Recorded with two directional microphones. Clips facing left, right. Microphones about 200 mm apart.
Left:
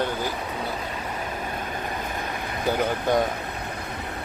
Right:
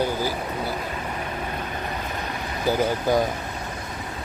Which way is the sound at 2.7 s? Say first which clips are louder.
Right 2 dB; centre (ahead or behind).